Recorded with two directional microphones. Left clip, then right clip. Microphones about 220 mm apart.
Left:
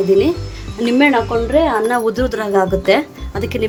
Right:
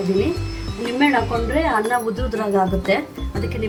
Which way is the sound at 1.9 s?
45° left (ahead or behind).